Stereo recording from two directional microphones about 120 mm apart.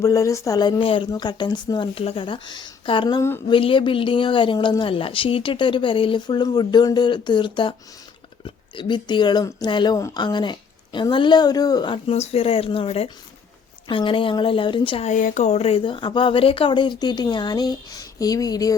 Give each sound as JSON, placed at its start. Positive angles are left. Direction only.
{"t": 0.0, "sound": "speech", "side_deg": 25}
{"t": 3.2, "sound": "speech", "side_deg": 20}
{"t": 3.5, "sound": "speech", "side_deg": 45}
{"t": 12.0, "sound": "speech", "side_deg": 60}
{"t": 15.0, "sound": "speech", "side_deg": 85}
{"t": 15.8, "sound": "speech", "side_deg": 40}